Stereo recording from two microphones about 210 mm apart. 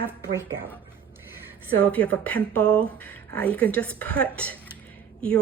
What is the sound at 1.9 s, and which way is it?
Speech, 5° left (ahead or behind).